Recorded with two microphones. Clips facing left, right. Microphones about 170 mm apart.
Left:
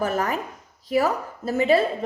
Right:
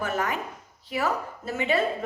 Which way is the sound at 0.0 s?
40° left (ahead or behind).